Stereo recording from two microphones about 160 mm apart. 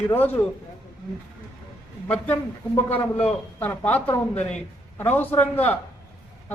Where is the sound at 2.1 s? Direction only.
10° left (ahead or behind).